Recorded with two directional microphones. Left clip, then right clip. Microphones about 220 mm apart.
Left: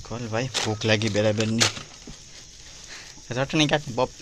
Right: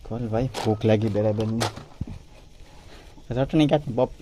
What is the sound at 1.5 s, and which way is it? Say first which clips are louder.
Speech: left 5 dB; 50° left (ahead or behind).